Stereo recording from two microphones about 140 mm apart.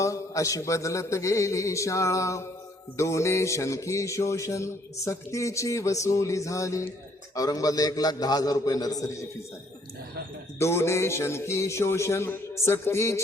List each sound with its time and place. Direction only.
0.0 s a man's voice: 20° left (ahead or behind)
10.6 s a man's voice: 20° left (ahead or behind)